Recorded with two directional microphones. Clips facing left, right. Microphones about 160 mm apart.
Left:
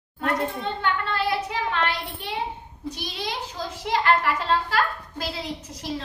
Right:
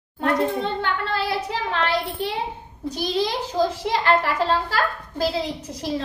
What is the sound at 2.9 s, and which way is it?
A child's voice, 40° right (ahead or behind).